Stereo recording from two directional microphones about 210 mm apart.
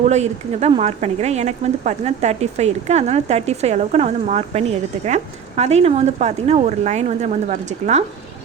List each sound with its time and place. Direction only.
0.0 s speech: 30° right (ahead or behind)